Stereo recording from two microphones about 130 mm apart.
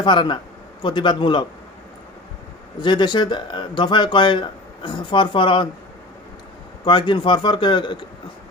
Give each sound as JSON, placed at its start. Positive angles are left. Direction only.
{"t": 0.0, "sound": "speech", "side_deg": 35}
{"t": 2.8, "sound": "speech", "side_deg": 35}
{"t": 6.8, "sound": "speech", "side_deg": 40}